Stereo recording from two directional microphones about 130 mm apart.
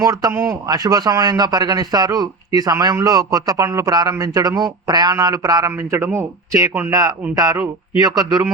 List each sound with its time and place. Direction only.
0.0 s a man's voice: 25° right (ahead or behind)
0.7 s a man's voice: 30° right (ahead or behind)